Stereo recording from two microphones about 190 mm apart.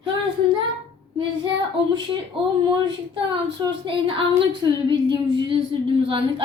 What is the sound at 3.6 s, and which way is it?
A woman's voice, 25° right (ahead or behind).